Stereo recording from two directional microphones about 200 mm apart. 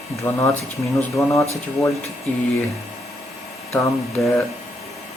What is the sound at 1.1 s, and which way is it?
Speech, centre (ahead or behind).